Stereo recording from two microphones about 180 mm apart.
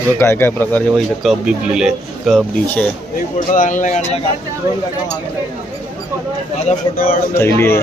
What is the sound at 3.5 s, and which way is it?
Speech, 45° left (ahead or behind).